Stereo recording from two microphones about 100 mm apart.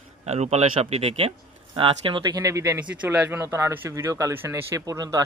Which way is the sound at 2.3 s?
30° right (ahead or behind).